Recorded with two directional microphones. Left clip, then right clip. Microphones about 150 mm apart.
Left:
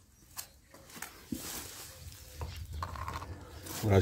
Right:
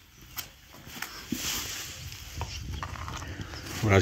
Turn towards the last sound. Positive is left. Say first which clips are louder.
# right 5 dB
turn(degrees=0)  # may be behind; listen again after turning